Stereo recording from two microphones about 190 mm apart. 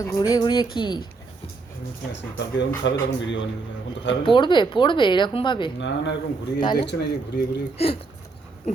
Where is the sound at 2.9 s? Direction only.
70° left (ahead or behind).